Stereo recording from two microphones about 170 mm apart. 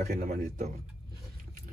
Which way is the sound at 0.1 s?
45° right (ahead or behind).